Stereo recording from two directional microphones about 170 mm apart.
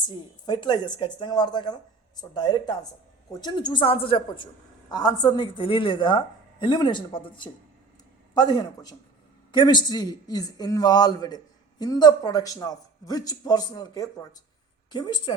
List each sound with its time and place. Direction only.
0.4 s a woman's voice: 25° left (ahead or behind)